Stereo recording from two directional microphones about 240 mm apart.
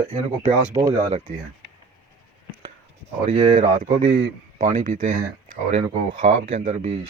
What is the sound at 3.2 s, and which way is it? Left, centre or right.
Speech, right.